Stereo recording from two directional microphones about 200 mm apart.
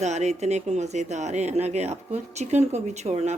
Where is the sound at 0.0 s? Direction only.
35° right (ahead or behind).